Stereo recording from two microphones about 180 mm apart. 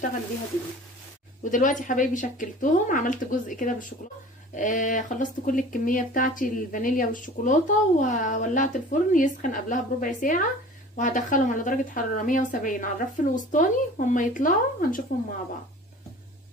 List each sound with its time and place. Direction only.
1.4 s speech: 45° left (ahead or behind)